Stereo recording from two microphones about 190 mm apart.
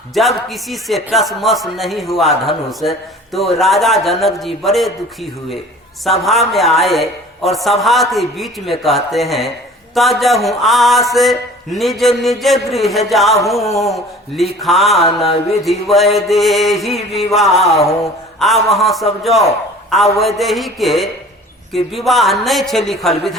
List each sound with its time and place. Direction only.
0.1 s speech: centre (ahead or behind)
15.0 s mantra: 35° left (ahead or behind)
15.6 s speech: centre (ahead or behind)
17.5 s mantra: 35° left (ahead or behind)
18.3 s speech: centre (ahead or behind)